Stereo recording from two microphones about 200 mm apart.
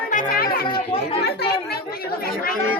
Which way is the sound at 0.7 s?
30° left (ahead or behind).